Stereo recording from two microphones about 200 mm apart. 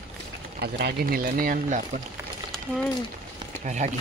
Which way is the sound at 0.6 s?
50° right (ahead or behind).